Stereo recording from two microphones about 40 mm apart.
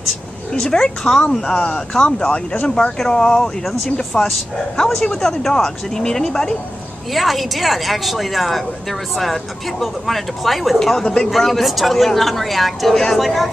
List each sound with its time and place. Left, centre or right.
0.6 s speech: centre
2.2 s speech: left
3.1 s speech: left
7.2 s speech: centre
10.8 s speech: centre